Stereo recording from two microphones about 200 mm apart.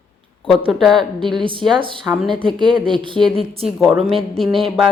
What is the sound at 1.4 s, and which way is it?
Speech, 25° right (ahead or behind).